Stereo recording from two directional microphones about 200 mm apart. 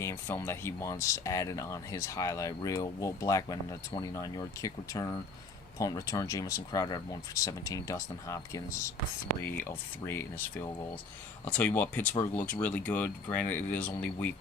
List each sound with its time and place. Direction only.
0.0 s speech: 10° left (ahead or behind)